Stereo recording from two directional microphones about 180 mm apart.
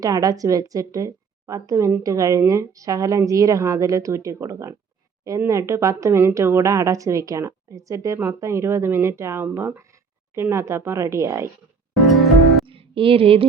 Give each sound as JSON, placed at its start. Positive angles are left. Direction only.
{"t": 0.0, "sound": "speech", "side_deg": -20}
{"t": 12.0, "sound": "music", "side_deg": 0}
{"t": 12.6, "sound": "a sound", "side_deg": -30}